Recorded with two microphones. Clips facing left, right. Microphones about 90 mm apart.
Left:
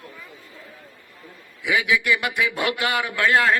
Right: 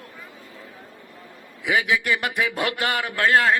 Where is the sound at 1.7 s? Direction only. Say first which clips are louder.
Left 1 dB; 40° right (ahead or behind).